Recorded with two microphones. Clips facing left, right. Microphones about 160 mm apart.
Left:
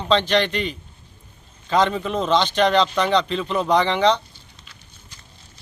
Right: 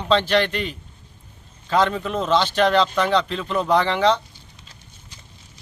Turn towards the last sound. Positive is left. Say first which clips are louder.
# even
turn(degrees=-5)  # may be behind; listen again after turning